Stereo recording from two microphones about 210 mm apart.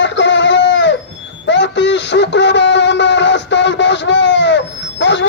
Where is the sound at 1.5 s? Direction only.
55° left (ahead or behind).